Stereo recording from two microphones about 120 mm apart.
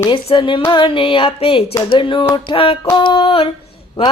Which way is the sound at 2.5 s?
50° left (ahead or behind).